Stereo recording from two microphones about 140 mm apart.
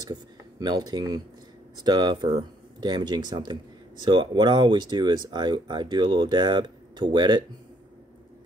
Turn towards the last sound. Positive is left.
turn(degrees=-30)  # may be behind; listen again after turning